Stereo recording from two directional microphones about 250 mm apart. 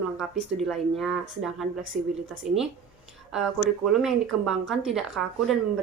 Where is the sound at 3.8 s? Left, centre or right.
Centre.